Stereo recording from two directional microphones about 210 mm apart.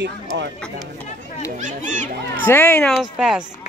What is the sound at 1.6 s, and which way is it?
Speech, 35° right (ahead or behind).